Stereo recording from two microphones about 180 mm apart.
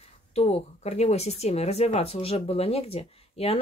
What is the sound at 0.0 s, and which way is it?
Speech, 35° left (ahead or behind).